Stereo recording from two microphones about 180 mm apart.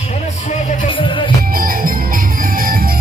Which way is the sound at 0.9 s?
30° left (ahead or behind).